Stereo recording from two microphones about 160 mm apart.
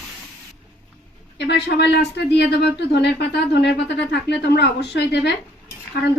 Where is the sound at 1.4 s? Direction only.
90° left.